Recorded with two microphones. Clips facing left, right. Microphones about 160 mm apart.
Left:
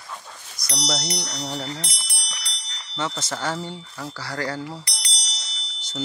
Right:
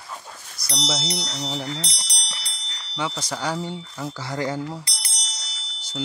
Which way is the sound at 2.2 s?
30° right (ahead or behind).